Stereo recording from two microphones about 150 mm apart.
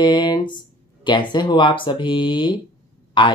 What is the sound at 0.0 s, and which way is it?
Speech, 30° left (ahead or behind).